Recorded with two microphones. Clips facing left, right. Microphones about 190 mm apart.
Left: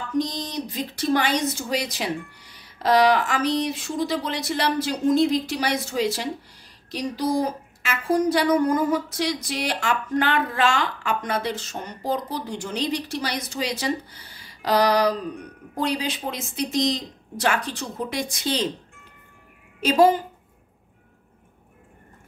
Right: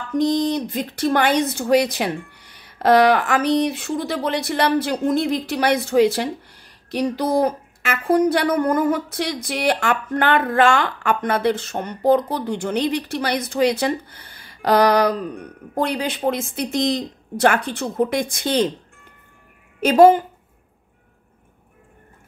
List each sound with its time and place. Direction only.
0.2 s speech: 55° right (ahead or behind)
19.8 s speech: 55° right (ahead or behind)